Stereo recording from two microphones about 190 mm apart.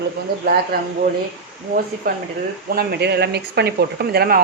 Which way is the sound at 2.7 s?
60° right (ahead or behind).